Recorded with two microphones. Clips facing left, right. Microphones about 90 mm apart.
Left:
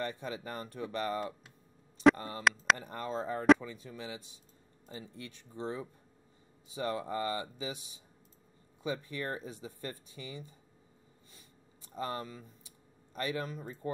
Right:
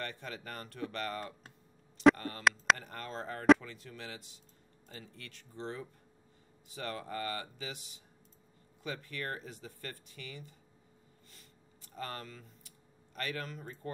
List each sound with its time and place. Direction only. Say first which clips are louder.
0.0 s speech: left 5 dB; 15° left (ahead or behind)
2.4 s speech: even; centre (ahead or behind)
2.8 s speech: left 5 dB; 15° left (ahead or behind)
8.8 s speech: left 4 dB; 20° left (ahead or behind)
11.3 s a sound: left 1 dB; 20° left (ahead or behind)